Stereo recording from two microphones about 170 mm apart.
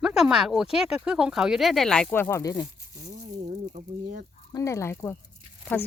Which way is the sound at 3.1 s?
45° right (ahead or behind).